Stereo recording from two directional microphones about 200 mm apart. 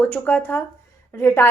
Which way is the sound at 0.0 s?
10° left (ahead or behind).